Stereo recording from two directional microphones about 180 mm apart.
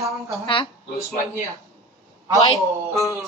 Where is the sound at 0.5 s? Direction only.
30° left (ahead or behind).